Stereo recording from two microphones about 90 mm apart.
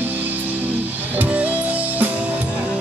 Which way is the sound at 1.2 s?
15° right (ahead or behind).